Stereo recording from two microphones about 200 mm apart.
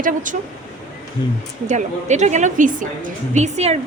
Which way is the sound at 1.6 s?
35° right (ahead or behind).